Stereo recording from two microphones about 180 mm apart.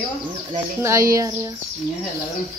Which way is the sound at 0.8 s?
15° right (ahead or behind).